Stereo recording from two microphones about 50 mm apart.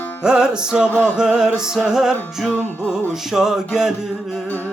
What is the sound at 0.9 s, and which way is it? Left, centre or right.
Music, left.